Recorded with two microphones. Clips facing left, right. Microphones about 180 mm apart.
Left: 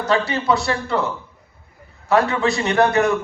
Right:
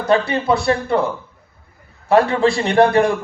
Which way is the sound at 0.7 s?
25° right (ahead or behind).